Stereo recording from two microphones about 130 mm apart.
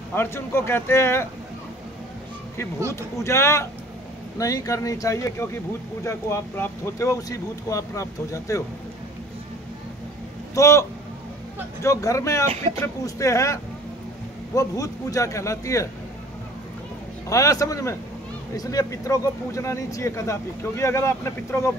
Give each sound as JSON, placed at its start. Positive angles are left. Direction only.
{"t": 0.1, "sound": "speech", "side_deg": 15}
{"t": 3.2, "sound": "speech", "side_deg": 20}
{"t": 10.5, "sound": "speech", "side_deg": 20}
{"t": 17.3, "sound": "speech", "side_deg": 25}